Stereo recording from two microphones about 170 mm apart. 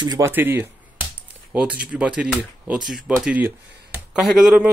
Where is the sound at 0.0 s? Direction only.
25° right (ahead or behind).